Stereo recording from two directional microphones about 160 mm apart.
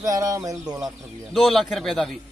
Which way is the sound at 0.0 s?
20° right (ahead or behind).